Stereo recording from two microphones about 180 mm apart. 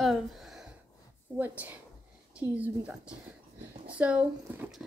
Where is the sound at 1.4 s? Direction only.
10° right (ahead or behind).